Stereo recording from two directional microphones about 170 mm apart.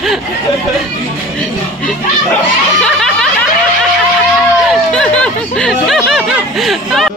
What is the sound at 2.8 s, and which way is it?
Snicker, 5° left (ahead or behind).